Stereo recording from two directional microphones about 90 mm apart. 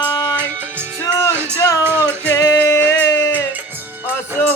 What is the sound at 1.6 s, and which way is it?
Music, 30° left (ahead or behind).